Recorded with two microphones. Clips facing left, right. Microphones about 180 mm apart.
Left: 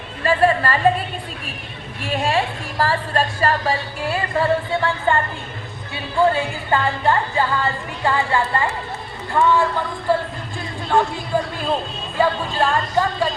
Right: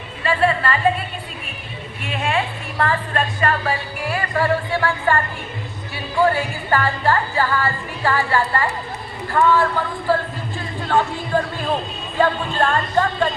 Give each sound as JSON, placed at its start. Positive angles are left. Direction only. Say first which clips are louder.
{"t": 0.2, "sound": "a woman's voice", "louder": "left 2 dB", "side_deg": 40}
{"t": 2.0, "sound": "a woman's voice", "louder": "left 2 dB", "side_deg": 35}
{"t": 9.4, "sound": "music", "louder": "right 1 dB", "side_deg": 15}
{"t": 10.8, "sound": "speech", "louder": "left 1 dB", "side_deg": 15}
{"t": 12.2, "sound": "music", "louder": "even", "side_deg": 10}